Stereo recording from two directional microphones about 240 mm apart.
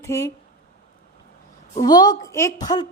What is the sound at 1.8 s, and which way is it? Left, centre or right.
A woman's voice, centre.